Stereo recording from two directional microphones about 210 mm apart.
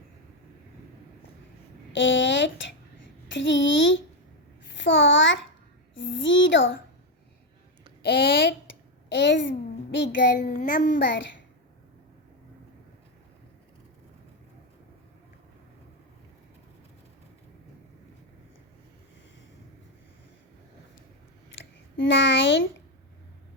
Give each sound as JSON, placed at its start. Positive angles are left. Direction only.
{"t": 1.9, "sound": "a child's voice", "side_deg": 60}
{"t": 8.0, "sound": "a woman's voice", "side_deg": 50}
{"t": 10.4, "sound": "a child's voice", "side_deg": 40}
{"t": 21.6, "sound": "a sound", "side_deg": 60}